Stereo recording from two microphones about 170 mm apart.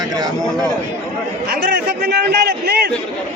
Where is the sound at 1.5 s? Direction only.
65° right (ahead or behind).